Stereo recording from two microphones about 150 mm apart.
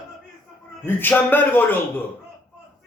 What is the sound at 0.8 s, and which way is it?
Speech, 15° left (ahead or behind).